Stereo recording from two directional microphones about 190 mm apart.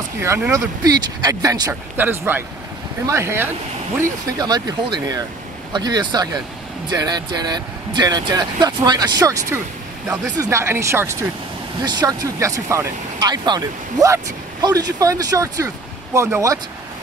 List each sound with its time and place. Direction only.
0.2 s speech: 15° right (ahead or behind)